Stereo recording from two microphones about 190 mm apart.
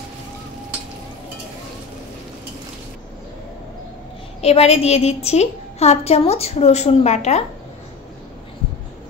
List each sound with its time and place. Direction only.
4.4 s a woman's voice: 30° left (ahead or behind)